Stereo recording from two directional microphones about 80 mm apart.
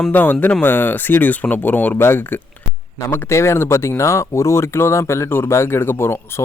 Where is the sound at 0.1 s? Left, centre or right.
Left.